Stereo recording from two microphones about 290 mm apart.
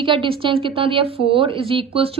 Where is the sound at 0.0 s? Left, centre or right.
Centre.